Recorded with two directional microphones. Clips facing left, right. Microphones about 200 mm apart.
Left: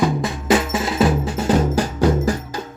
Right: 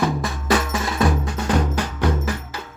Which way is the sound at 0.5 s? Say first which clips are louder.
Left 3 dB; 20° left (ahead or behind).